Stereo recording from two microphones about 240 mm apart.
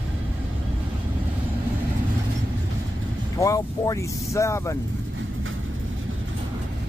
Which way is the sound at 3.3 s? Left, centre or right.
Centre.